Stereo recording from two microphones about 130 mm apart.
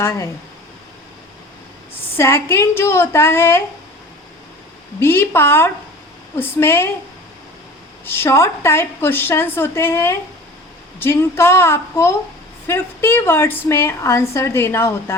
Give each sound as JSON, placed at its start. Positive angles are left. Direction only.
{"t": 0.0, "sound": "a woman's voice", "side_deg": 20}
{"t": 1.9, "sound": "a woman's voice", "side_deg": 20}
{"t": 4.9, "sound": "a woman's voice", "side_deg": 20}
{"t": 8.0, "sound": "a woman's voice", "side_deg": 20}